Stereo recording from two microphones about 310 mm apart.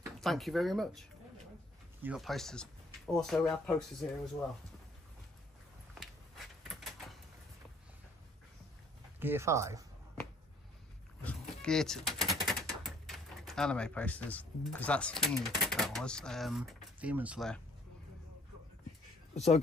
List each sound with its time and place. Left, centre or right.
0.0 s speech: centre
2.0 s speech: centre
6.6 s a sound: centre
9.2 s speech: centre
11.2 s speech: centre
19.3 s speech: left